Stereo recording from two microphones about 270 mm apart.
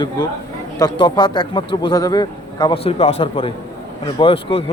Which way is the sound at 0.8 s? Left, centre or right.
Centre.